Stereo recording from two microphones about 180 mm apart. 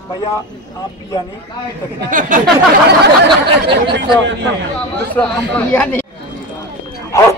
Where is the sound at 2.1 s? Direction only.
45° right (ahead or behind).